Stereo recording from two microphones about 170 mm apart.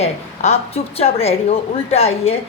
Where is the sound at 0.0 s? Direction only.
35° left (ahead or behind).